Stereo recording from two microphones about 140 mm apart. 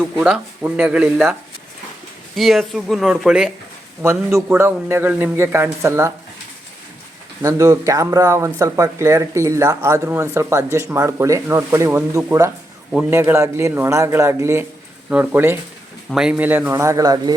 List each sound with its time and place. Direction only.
0.0 s a man's voice: 10° right (ahead or behind)
2.3 s speech: centre (ahead or behind)
4.0 s a man's voice: 20° right (ahead or behind)
7.4 s a man's voice: 25° right (ahead or behind)
16.0 s a man's voice: 5° right (ahead or behind); by 17.3 s 25° right (ahead or behind)